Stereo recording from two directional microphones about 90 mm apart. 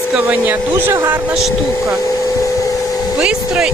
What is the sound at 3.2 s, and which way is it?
Speech, 10° right (ahead or behind).